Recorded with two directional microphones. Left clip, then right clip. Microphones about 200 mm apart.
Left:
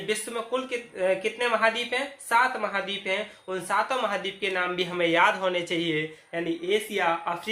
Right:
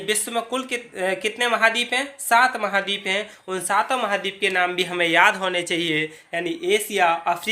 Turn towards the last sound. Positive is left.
turn(degrees=-55)  # may be behind; listen again after turning